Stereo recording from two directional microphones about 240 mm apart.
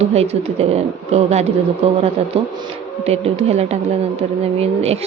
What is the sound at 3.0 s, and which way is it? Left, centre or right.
Speech, right.